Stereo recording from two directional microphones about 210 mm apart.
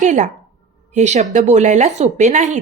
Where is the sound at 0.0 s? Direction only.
35° right (ahead or behind).